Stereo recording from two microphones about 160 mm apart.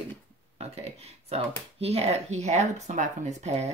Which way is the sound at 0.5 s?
40° right (ahead or behind).